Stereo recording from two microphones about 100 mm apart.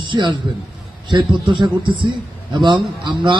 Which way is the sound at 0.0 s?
50° right (ahead or behind).